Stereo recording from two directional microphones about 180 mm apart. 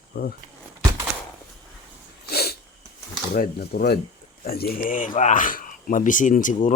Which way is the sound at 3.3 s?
60° left (ahead or behind).